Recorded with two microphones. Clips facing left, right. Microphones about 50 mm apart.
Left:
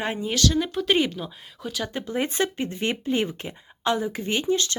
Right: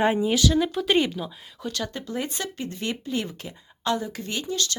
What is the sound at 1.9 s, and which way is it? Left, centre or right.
Speech, left.